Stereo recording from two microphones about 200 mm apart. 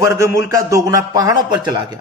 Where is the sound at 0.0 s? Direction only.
15° right (ahead or behind).